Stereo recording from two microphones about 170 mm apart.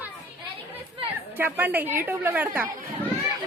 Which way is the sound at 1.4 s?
10° right (ahead or behind).